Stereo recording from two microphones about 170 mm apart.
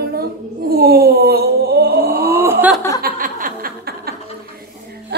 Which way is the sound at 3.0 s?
55° right (ahead or behind).